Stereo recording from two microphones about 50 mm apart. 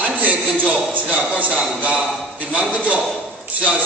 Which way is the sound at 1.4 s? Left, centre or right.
Right.